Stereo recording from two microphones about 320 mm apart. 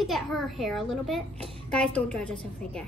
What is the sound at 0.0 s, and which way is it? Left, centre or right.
A child's voice, centre.